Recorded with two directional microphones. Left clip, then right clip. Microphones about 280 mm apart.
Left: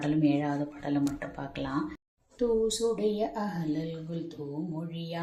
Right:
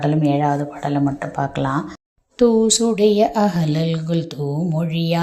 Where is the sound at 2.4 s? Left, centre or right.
Right.